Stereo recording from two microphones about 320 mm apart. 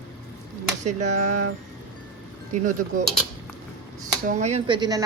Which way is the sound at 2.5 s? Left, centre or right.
Right.